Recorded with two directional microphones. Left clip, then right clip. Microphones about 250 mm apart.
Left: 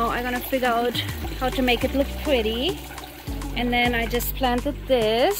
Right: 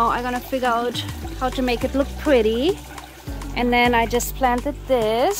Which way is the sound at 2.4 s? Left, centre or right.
Centre.